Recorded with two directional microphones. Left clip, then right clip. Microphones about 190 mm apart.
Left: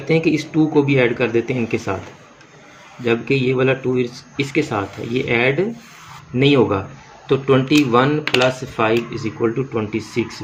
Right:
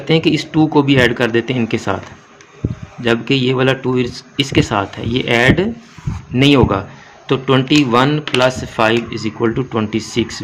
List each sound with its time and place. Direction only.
0.1 s speech: 40° right (ahead or behind)
3.0 s speech: 40° right (ahead or behind)